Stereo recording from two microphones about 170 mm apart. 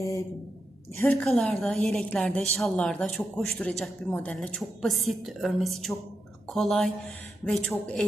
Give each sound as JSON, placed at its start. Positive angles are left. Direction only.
{"t": 0.9, "sound": "speech", "side_deg": 15}
{"t": 1.4, "sound": "a woman's voice", "side_deg": 5}